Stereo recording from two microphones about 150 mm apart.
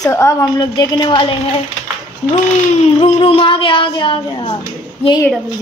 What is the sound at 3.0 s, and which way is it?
A woman's voice, 40° left (ahead or behind).